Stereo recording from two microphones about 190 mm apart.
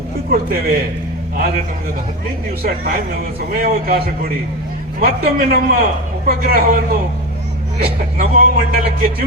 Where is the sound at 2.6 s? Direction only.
50° right (ahead or behind).